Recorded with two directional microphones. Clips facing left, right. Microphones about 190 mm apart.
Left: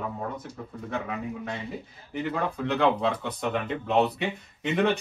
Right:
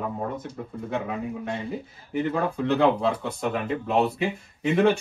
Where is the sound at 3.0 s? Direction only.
Centre (ahead or behind).